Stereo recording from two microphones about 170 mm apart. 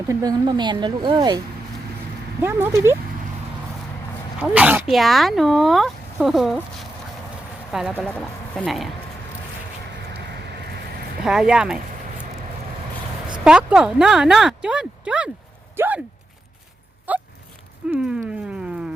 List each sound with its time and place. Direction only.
0.1 s speech: 20° right (ahead or behind)
2.4 s speech: 15° right (ahead or behind)
4.4 s speech: 10° right (ahead or behind)
11.3 s speech: 5° right (ahead or behind)
13.4 s speech: 5° right (ahead or behind)
15.7 s a sound: 15° right (ahead or behind)
17.1 s a sound: 10° right (ahead or behind)
17.9 s speech: 5° right (ahead or behind)